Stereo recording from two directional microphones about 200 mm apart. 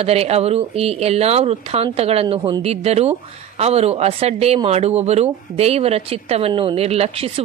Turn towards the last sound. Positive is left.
turn(degrees=-30)  # may be behind; listen again after turning